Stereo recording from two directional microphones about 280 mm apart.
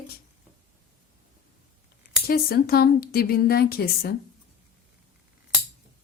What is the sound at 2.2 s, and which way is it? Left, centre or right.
Speech, left.